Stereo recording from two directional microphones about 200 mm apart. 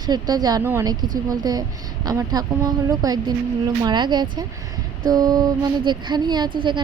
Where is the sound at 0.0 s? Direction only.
20° right (ahead or behind).